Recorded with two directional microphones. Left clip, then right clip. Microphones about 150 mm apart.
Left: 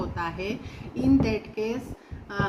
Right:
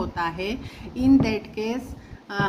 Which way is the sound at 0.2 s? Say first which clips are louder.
Right 5 dB; 55° right (ahead or behind).